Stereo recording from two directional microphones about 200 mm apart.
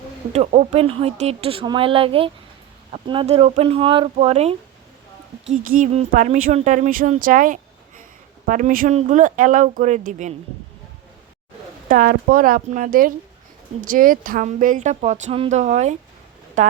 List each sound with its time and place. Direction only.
0.3 s speech: 30° right (ahead or behind)
5.8 s speech: 35° right (ahead or behind)
11.9 s speech: 45° right (ahead or behind)